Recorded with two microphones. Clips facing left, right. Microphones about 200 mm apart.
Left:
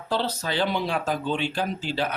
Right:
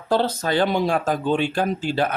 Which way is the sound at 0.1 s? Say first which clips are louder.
Right 6 dB; 50° right (ahead or behind).